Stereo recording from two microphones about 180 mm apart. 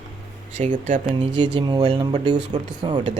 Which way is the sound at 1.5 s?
25° right (ahead or behind).